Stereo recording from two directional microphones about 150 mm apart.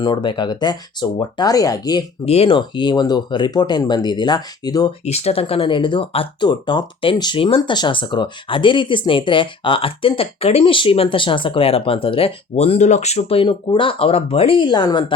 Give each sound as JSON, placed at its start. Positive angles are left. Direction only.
{"t": 0.0, "sound": "speech", "side_deg": 30}
{"t": 2.2, "sound": "speech", "side_deg": 40}
{"t": 5.0, "sound": "speech", "side_deg": 45}